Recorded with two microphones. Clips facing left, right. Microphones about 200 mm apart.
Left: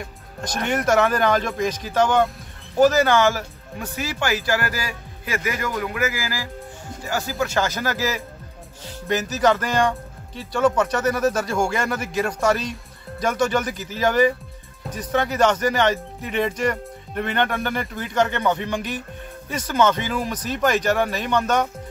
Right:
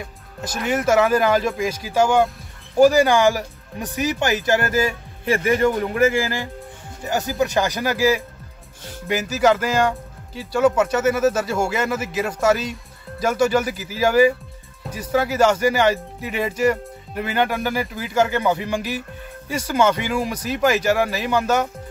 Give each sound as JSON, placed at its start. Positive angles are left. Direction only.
{"t": 0.4, "sound": "speech", "side_deg": -5}